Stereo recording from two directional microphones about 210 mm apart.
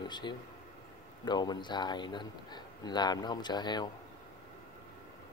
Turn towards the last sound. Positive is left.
turn(degrees=20)  # may be behind; listen again after turning